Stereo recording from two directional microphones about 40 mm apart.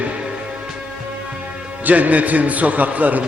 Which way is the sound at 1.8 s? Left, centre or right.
Right.